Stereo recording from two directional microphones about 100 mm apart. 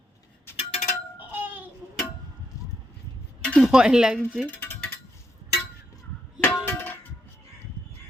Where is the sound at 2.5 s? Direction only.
35° left (ahead or behind).